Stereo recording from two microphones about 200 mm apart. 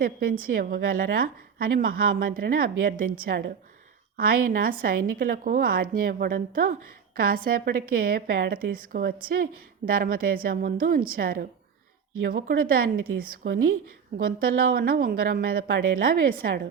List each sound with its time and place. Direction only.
0.0 s a woman's voice: 45° right (ahead or behind)